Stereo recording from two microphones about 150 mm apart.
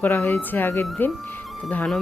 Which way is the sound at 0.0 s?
10° left (ahead or behind).